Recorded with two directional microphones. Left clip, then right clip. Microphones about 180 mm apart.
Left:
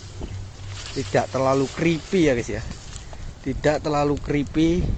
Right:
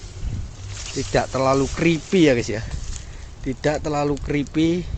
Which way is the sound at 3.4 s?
5° right (ahead or behind).